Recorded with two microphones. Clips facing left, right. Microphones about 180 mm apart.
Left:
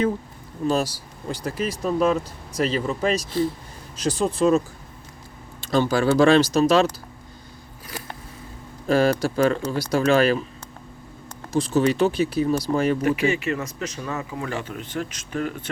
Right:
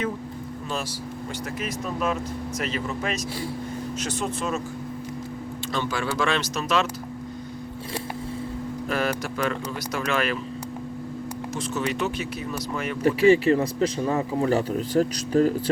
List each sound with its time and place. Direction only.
1.3 s speech: 35° left (ahead or behind)
5.7 s speech: 35° left (ahead or behind)
8.9 s speech: 30° left (ahead or behind)
11.5 s speech: 35° left (ahead or behind)
13.0 s speech: 30° right (ahead or behind)